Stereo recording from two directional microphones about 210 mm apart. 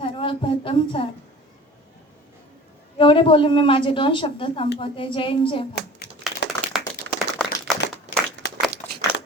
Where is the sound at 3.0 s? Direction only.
25° left (ahead or behind).